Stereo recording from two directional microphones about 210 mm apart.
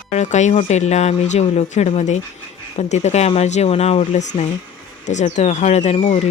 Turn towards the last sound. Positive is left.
turn(degrees=35)  # may be behind; listen again after turning